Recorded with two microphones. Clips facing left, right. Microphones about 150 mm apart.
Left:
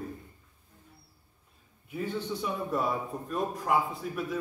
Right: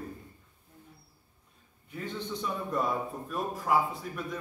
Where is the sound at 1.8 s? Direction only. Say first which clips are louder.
Left 4 dB; 10° left (ahead or behind).